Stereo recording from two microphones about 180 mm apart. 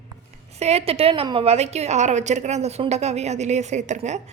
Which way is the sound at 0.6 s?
35° right (ahead or behind).